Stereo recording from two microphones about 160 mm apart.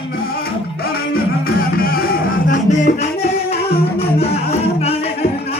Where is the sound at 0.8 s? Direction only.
70° left (ahead or behind).